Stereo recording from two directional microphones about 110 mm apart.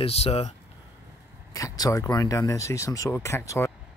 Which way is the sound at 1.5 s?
35° left (ahead or behind).